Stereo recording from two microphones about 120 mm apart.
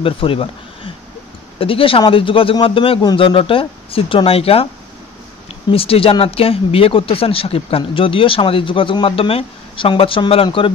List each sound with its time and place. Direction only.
0.0 s speech: 50° left (ahead or behind)
5.7 s speech: 55° left (ahead or behind)